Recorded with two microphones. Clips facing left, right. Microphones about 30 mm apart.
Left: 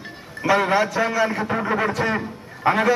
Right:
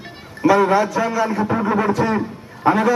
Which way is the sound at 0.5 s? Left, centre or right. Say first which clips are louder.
Right 3 dB; left.